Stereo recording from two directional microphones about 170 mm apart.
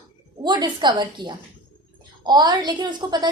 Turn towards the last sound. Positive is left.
turn(degrees=-25)  # may be behind; listen again after turning